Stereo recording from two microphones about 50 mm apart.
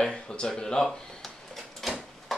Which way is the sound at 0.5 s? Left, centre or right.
Centre.